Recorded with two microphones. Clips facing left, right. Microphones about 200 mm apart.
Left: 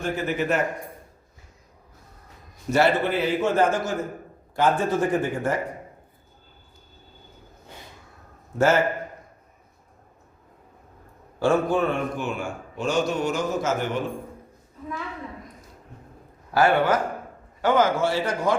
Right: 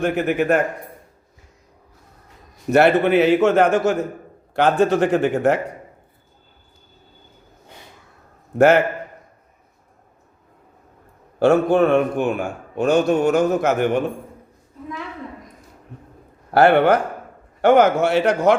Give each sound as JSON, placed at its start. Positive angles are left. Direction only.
{"t": 0.0, "sound": "a man's voice", "side_deg": -60}
{"t": 2.6, "sound": "a man's voice", "side_deg": -65}
{"t": 8.5, "sound": "a man's voice", "side_deg": -60}
{"t": 11.3, "sound": "a man's voice", "side_deg": -70}
{"t": 16.5, "sound": "a man's voice", "side_deg": -65}